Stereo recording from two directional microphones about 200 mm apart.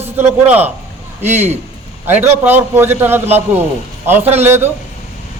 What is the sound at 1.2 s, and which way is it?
Speech, 35° right (ahead or behind).